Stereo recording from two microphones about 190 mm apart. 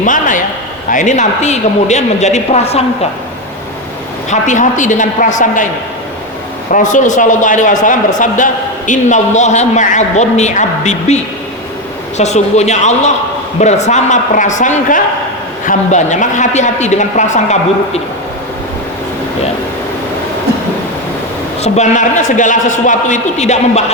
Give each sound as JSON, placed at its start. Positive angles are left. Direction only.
{"t": 0.0, "sound": "a man's voice", "side_deg": 45}
{"t": 4.3, "sound": "a man's voice", "side_deg": 40}
{"t": 6.7, "sound": "a man's voice", "side_deg": 40}
{"t": 21.6, "sound": "a man's voice", "side_deg": 40}